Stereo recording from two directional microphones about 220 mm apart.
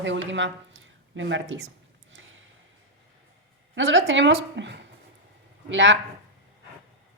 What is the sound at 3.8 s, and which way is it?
A woman's voice, 60° right (ahead or behind).